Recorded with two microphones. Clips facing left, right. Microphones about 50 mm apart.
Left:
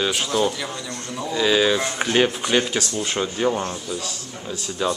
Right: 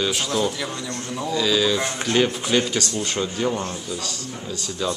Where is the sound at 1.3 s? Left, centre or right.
Left.